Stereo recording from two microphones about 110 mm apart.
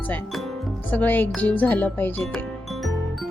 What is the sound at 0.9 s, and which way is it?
Speech, 15° left (ahead or behind).